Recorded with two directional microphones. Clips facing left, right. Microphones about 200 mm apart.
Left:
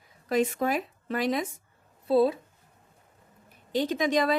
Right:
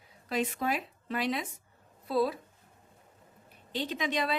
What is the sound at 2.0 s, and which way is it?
Speech, 25° left (ahead or behind).